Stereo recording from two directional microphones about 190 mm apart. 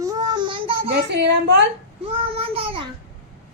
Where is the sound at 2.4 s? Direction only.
30° right (ahead or behind).